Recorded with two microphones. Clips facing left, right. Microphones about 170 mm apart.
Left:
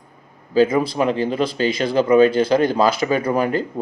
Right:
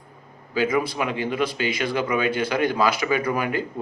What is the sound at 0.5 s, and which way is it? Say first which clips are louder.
Speech: left 6 dB; 35° left (ahead or behind).